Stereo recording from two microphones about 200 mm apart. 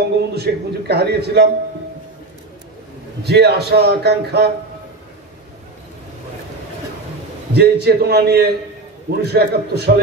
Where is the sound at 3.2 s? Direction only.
55° right (ahead or behind).